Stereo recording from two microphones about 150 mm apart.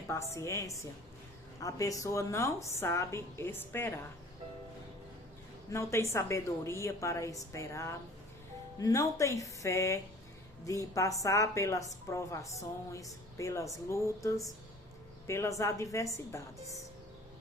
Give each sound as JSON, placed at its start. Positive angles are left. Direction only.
{"t": 0.1, "sound": "a woman's voice", "side_deg": 20}
{"t": 5.7, "sound": "a woman's voice", "side_deg": 20}
{"t": 15.3, "sound": "a woman's voice", "side_deg": 20}